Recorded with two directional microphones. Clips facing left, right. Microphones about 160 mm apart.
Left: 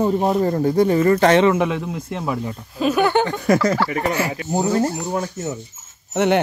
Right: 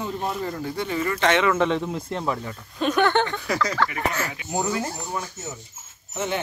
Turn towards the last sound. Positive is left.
turn(degrees=70)  # may be behind; listen again after turning